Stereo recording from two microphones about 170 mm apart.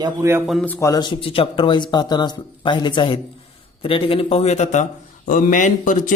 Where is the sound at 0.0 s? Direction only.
15° right (ahead or behind).